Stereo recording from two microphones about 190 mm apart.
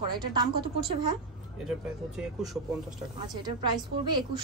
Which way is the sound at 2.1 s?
Centre (ahead or behind).